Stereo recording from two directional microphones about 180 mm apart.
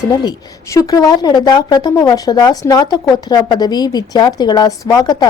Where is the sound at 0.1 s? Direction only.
20° left (ahead or behind).